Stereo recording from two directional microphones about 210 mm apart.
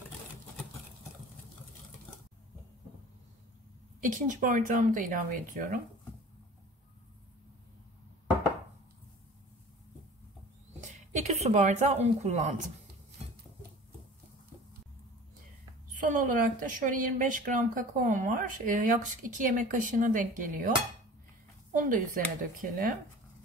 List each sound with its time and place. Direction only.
4.0 s a woman's voice: 40° right (ahead or behind)
10.8 s a sound: 35° right (ahead or behind)
11.4 s a woman's voice: 30° right (ahead or behind)
15.9 s a woman's voice: 40° right (ahead or behind)
21.7 s a woman's voice: 40° right (ahead or behind)